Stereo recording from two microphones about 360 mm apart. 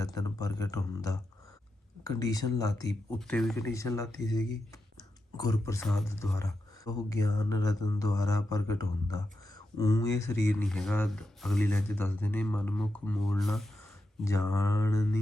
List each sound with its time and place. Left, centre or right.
0.0 s speech: centre